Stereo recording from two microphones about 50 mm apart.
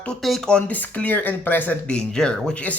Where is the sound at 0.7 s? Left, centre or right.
Left.